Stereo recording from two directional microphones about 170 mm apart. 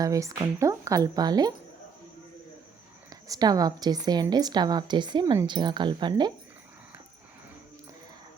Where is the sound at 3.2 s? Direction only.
20° right (ahead or behind).